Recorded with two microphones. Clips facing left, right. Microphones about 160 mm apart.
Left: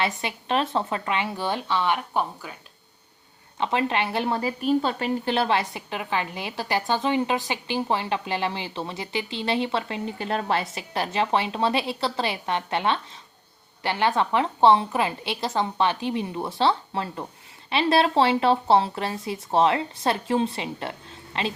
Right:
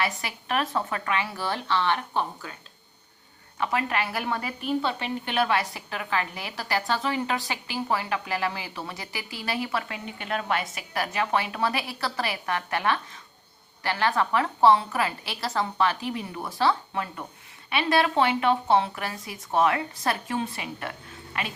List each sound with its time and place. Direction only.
0.0 s a woman's voice: 25° left (ahead or behind)
3.6 s a woman's voice: 25° left (ahead or behind)